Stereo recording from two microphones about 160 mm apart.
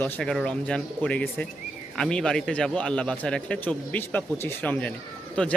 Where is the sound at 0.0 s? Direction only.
5° left (ahead or behind).